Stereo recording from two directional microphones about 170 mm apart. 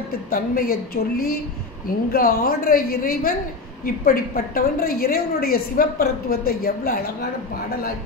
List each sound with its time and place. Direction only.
0.3 s a woman's voice: 60° left (ahead or behind)